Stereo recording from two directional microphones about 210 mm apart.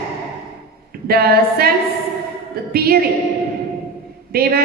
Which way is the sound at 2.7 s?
45° right (ahead or behind).